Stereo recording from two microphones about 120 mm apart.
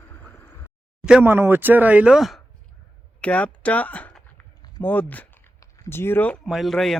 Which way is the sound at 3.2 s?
10° left (ahead or behind).